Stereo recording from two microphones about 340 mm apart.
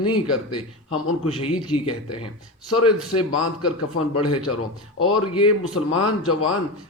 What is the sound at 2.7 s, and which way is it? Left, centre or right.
Speech, left.